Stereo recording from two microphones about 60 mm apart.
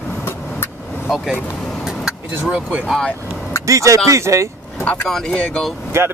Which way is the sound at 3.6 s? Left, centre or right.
Right.